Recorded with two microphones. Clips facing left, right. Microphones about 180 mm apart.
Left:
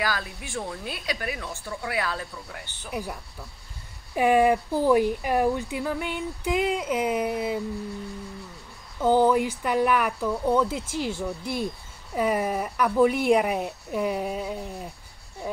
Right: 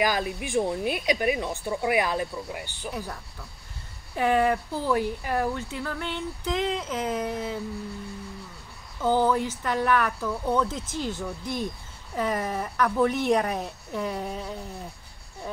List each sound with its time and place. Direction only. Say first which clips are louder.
0.0 s a woman's voice: right 4 dB; 20° right (ahead or behind)
2.9 s speech: left 4 dB; 10° left (ahead or behind)
9.0 s speech: left 3 dB; 15° left (ahead or behind)